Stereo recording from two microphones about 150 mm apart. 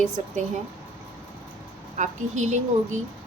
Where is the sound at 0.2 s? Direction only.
55° right (ahead or behind).